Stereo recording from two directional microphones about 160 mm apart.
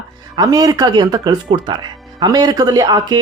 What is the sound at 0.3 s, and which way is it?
Speech, 20° right (ahead or behind).